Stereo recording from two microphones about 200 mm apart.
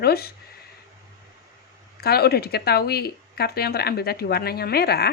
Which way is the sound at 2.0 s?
50° left (ahead or behind).